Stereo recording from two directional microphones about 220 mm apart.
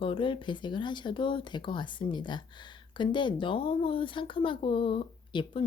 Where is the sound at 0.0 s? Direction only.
25° left (ahead or behind).